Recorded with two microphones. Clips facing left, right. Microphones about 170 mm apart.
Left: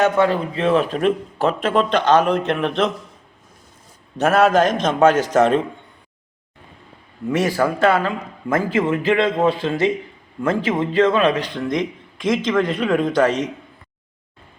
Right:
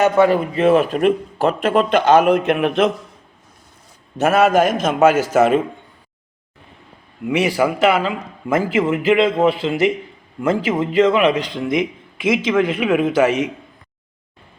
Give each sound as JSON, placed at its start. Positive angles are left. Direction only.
{"t": 0.0, "sound": "a man's voice", "side_deg": -5}
{"t": 4.2, "sound": "speech", "side_deg": -5}
{"t": 7.2, "sound": "speech", "side_deg": -15}
{"t": 11.5, "sound": "speech", "side_deg": -10}